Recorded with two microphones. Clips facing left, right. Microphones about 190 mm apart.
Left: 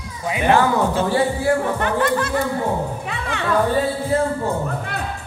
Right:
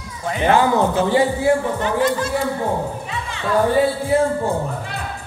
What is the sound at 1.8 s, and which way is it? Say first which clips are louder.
Music: right 1 dB; 60° left (ahead or behind).